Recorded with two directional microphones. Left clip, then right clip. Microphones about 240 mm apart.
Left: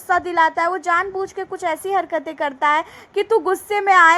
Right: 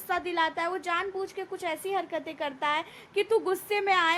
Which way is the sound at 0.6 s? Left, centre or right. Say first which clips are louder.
Left 11 dB; centre.